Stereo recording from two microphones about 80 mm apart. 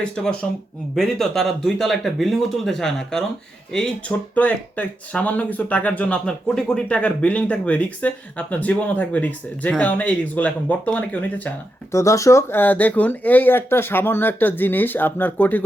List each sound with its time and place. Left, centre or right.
0.0 s speech: centre
4.4 s speech: centre
11.9 s speech: left